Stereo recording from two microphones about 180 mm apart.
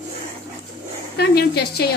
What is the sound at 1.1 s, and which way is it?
Speech, 60° left (ahead or behind).